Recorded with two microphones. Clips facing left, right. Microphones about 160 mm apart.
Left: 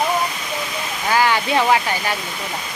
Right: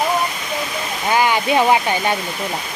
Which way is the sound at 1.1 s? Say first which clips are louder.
Right 1 dB; 20° right (ahead or behind).